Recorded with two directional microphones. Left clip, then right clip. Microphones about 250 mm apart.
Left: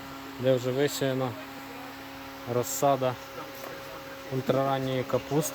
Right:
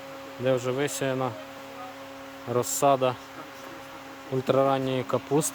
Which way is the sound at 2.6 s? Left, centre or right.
Right.